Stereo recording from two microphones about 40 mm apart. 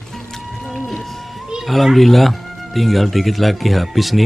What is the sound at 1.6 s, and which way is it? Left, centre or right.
Speech, centre.